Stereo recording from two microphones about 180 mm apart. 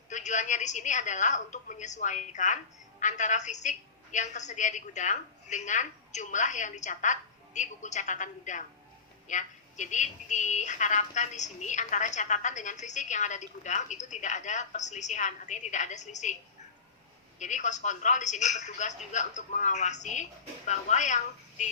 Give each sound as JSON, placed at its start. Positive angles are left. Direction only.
{"t": 0.1, "sound": "a woman's voice", "side_deg": 40}
{"t": 17.4, "sound": "a woman's voice", "side_deg": 40}